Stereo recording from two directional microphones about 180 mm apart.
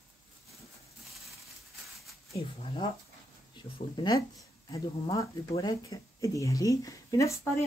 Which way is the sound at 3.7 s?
25° left (ahead or behind).